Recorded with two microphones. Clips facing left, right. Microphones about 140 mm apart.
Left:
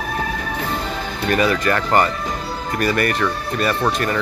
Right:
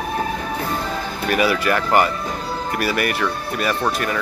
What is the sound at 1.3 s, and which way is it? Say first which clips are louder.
Speech: left 1 dB; 10° right (ahead or behind).